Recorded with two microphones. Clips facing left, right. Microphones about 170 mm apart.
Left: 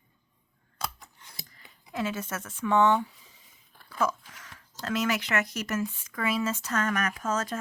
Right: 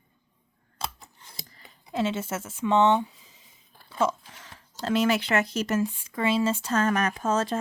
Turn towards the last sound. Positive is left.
turn(degrees=-30)  # may be behind; listen again after turning